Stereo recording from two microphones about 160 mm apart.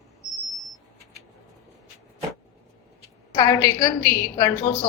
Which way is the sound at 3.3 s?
20° left (ahead or behind).